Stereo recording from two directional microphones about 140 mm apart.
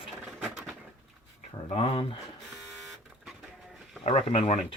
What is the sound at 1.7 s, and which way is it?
Speech, 40° left (ahead or behind).